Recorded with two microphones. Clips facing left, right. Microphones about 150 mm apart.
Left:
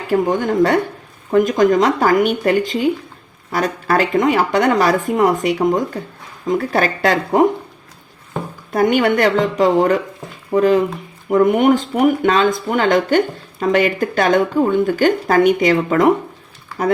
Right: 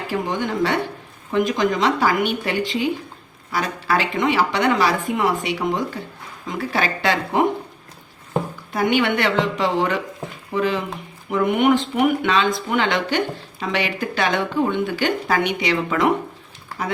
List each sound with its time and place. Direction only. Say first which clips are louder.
0.1 s speech: left 8 dB; 45° left (ahead or behind)
8.7 s speech: left 5 dB; 45° left (ahead or behind)